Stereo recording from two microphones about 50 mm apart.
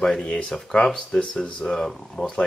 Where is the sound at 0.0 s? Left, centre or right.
Centre.